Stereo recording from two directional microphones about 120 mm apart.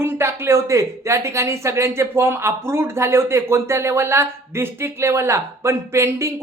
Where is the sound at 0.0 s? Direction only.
20° right (ahead or behind).